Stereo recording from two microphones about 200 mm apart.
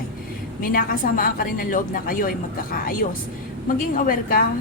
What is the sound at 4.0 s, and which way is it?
Speech, 45° left (ahead or behind).